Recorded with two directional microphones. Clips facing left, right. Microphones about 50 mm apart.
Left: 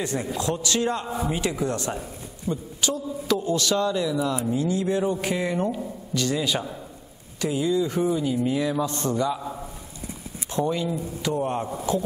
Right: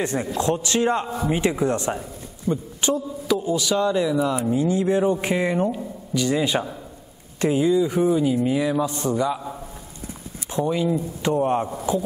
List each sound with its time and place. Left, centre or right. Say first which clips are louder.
0.0 s a man's voice: right 4 dB; right
3.3 s a man's voice: right 1 dB; centre
5.7 s speech: right 2 dB; centre
6.2 s a man's voice: right 4 dB; right
7.7 s mantra: right 4 dB; centre
10.5 s speech: right 2 dB; centre
10.9 s a man's voice: right 5 dB; right
11.9 s a man's voice: right 1 dB; centre